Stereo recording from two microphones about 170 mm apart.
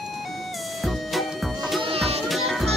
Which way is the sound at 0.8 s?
Centre (ahead or behind).